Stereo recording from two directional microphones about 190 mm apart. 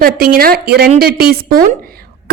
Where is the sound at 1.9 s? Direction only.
50° right (ahead or behind).